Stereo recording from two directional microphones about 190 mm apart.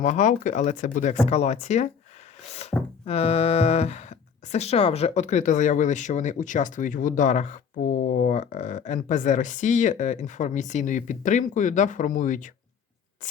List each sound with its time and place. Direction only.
0.0 s speech: 40° left (ahead or behind)
2.5 s a sound: 35° left (ahead or behind)
3.1 s speech: 30° left (ahead or behind)